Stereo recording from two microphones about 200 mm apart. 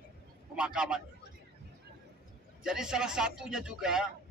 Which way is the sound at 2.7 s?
5° right (ahead or behind).